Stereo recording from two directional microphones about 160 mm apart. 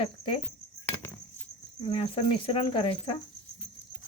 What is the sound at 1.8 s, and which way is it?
Cricket, 35° left (ahead or behind).